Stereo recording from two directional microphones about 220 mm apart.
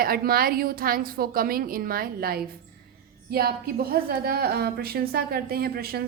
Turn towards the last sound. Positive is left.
turn(degrees=-45)  # may be behind; listen again after turning